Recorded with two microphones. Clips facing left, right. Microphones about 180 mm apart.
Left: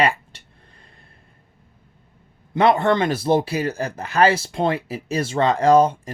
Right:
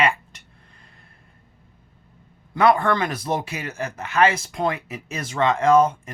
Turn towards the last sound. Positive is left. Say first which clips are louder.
# left 2 dB
turn(degrees=35)  # may be behind; listen again after turning